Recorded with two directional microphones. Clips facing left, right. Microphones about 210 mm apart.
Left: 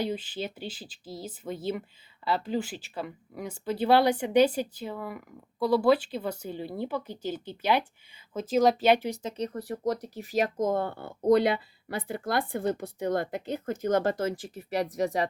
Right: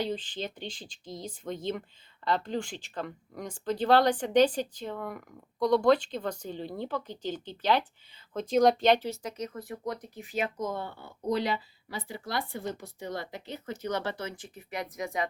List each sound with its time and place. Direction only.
0.0 s speech: 10° left (ahead or behind)
9.3 s speech: 35° left (ahead or behind)